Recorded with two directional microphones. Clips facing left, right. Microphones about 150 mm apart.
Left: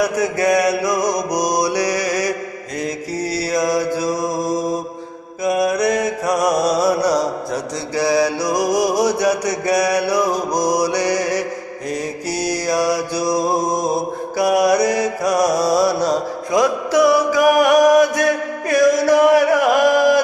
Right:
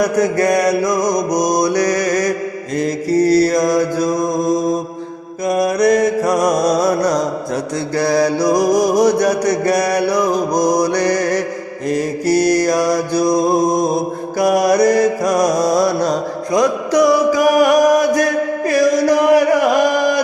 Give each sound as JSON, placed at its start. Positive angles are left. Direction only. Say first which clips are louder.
{"t": 0.0, "sound": "mantra", "louder": "right 3 dB", "side_deg": 5}
{"t": 1.5, "sound": "mantra", "louder": "right 3 dB", "side_deg": -50}
{"t": 2.0, "sound": "mantra", "louder": "right 4 dB", "side_deg": 5}
{"t": 8.4, "sound": "music", "louder": "right 5 dB", "side_deg": -55}
{"t": 8.8, "sound": "mantra", "louder": "right 4 dB", "side_deg": 5}
{"t": 15.4, "sound": "music", "louder": "right 2 dB", "side_deg": -20}
{"t": 15.7, "sound": "music", "louder": "right 1 dB", "side_deg": 5}